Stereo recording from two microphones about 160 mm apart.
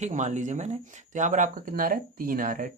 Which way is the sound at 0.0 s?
45° right (ahead or behind).